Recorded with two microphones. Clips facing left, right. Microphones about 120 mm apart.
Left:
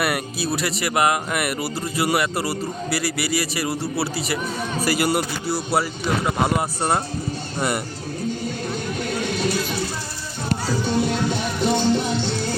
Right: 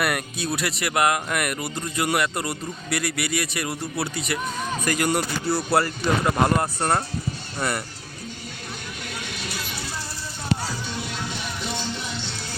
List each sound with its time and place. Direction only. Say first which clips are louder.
0.0 s speech: left 2 dB; 5° left (ahead or behind)
9.0 s a sound: left 11 dB; 40° left (ahead or behind)
10.5 s music: left 6 dB; 40° left (ahead or behind)